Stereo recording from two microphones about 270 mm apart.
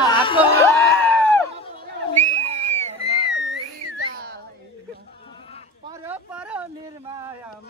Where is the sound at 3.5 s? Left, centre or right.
Right.